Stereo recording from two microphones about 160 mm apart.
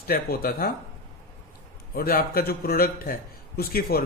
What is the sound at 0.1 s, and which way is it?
Speech, 70° left (ahead or behind).